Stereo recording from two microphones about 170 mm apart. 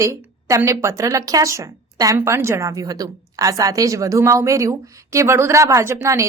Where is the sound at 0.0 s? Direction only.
20° right (ahead or behind).